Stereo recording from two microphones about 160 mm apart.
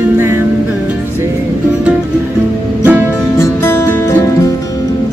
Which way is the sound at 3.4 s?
15° left (ahead or behind).